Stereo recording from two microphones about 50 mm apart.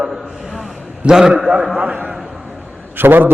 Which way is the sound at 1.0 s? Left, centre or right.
Centre.